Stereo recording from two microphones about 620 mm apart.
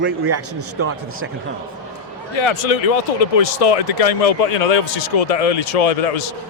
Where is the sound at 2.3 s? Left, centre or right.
Left.